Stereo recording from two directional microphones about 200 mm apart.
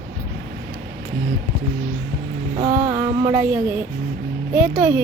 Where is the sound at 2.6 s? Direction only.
15° right (ahead or behind).